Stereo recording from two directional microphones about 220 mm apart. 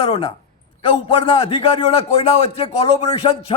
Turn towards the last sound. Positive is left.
turn(degrees=25)  # may be behind; listen again after turning